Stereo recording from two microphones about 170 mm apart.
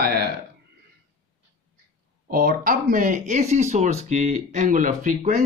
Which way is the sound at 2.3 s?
60° right (ahead or behind).